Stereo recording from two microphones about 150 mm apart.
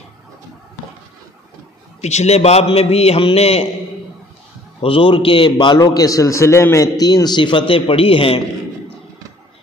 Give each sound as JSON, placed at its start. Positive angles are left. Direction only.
{"t": 2.0, "sound": "a man's voice", "side_deg": 50}
{"t": 4.8, "sound": "a man's voice", "side_deg": 35}